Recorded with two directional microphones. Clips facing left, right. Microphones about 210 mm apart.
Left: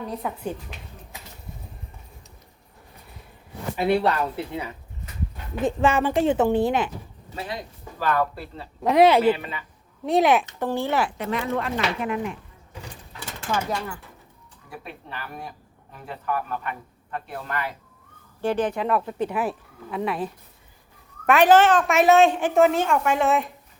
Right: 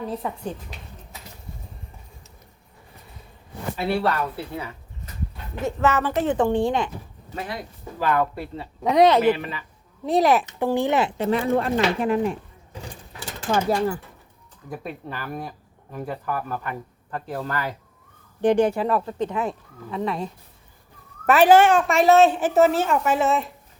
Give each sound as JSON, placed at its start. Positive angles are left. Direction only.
{"t": 0.1, "sound": "speech", "side_deg": 0}
{"t": 3.8, "sound": "a woman's voice", "side_deg": 20}
{"t": 7.3, "sound": "speech", "side_deg": 25}
{"t": 7.9, "sound": "speech", "side_deg": -15}
{"t": 8.8, "sound": "speech", "side_deg": 5}
{"t": 10.6, "sound": "speech", "side_deg": -15}
{"t": 11.2, "sound": "speech", "side_deg": -30}
{"t": 13.5, "sound": "speech", "side_deg": -35}
{"t": 18.4, "sound": "speech", "side_deg": -15}
{"t": 21.2, "sound": "speech", "side_deg": -5}